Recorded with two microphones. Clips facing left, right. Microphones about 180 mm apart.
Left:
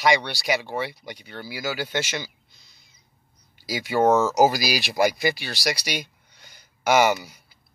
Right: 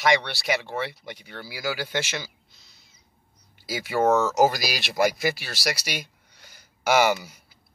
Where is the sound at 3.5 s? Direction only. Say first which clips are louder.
Left 2 dB; centre (ahead or behind).